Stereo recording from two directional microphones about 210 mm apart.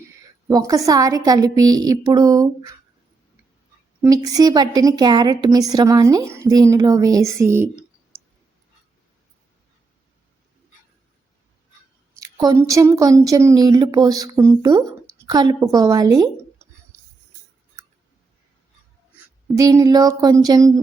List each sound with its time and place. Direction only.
0.4 s speech: 15° right (ahead or behind)
4.0 s speech: 15° right (ahead or behind)
12.2 s speech: 15° right (ahead or behind)
19.5 s speech: 15° right (ahead or behind)